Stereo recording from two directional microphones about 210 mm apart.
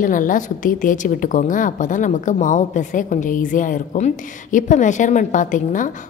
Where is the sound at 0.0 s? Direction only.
40° left (ahead or behind).